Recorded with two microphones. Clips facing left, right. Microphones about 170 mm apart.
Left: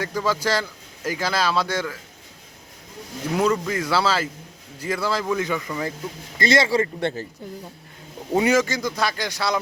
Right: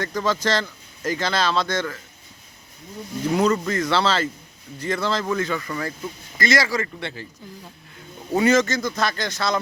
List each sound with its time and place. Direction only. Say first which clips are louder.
0.0 s speech: even; 10° left (ahead or behind)
3.3 s speech: right 1 dB; 10° left (ahead or behind)
6.4 s speech: left 3 dB; 30° left (ahead or behind)
8.3 s speech: right 1 dB; 10° left (ahead or behind)